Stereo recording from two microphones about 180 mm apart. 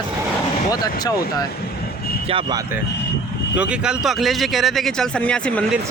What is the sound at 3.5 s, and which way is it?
Speech, 5° right (ahead or behind).